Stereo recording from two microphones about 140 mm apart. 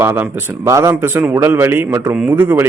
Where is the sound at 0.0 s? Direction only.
15° right (ahead or behind).